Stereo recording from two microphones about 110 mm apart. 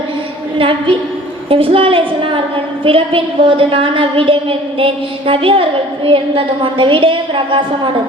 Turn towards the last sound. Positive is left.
turn(degrees=-50)  # may be behind; listen again after turning